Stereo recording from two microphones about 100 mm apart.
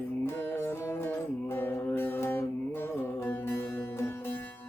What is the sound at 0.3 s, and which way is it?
Music, 20° left (ahead or behind).